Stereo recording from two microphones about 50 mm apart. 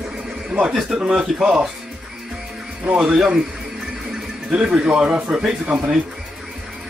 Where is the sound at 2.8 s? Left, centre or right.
Centre.